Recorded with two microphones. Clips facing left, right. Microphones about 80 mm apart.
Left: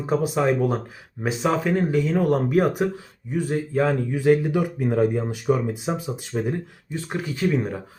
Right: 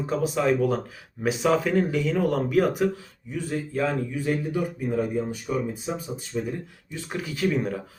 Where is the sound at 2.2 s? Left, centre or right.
Left.